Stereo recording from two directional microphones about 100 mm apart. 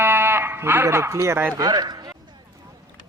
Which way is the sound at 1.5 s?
40° right (ahead or behind).